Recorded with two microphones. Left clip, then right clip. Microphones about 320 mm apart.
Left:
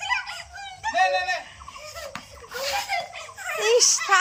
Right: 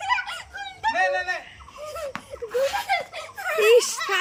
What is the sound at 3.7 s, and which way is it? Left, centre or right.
Speech, centre.